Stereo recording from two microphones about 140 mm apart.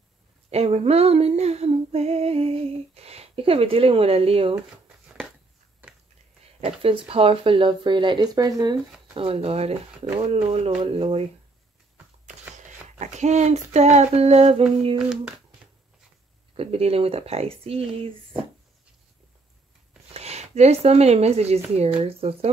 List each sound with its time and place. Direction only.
0.5 s female singing: 50° right (ahead or behind)
4.8 s a sound: centre (ahead or behind)
6.6 s speech: 40° right (ahead or behind)
10.1 s female singing: 45° right (ahead or behind)
10.8 s speech: 40° right (ahead or behind)
13.0 s female singing: 55° right (ahead or behind)
15.0 s speech: 5° right (ahead or behind)
16.5 s female singing: 45° right (ahead or behind)
20.2 s speech: 50° right (ahead or behind)
21.7 s female singing: 45° right (ahead or behind)